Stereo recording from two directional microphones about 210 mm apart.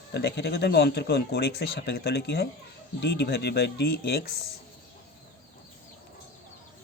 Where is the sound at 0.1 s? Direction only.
50° left (ahead or behind).